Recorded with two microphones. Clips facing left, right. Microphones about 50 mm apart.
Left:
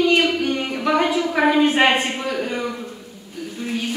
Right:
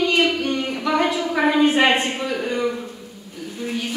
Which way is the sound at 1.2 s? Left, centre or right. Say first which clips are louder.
Left 1 dB; centre.